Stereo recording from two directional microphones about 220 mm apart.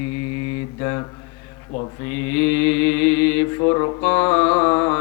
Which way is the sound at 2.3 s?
10° left (ahead or behind).